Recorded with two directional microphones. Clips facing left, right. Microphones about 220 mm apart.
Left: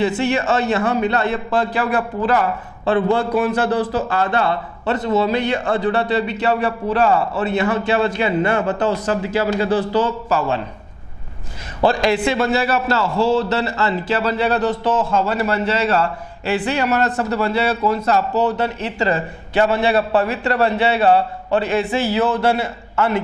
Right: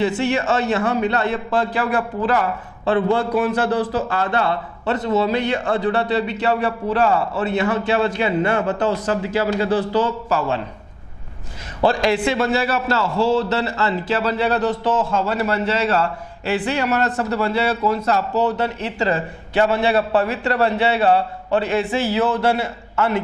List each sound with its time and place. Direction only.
0.0 s a man's voice: 15° left (ahead or behind)
11.8 s a man's voice: 15° left (ahead or behind)
13.0 s a man's voice: 30° left (ahead or behind)
13.5 s a man's voice: 15° left (ahead or behind)
18.6 s a man's voice: 15° left (ahead or behind)